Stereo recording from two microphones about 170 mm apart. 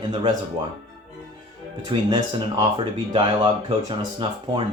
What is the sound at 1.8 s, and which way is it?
Speech, 25° right (ahead or behind).